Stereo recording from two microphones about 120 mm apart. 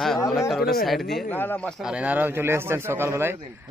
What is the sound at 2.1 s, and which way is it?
A man's voice, 15° right (ahead or behind).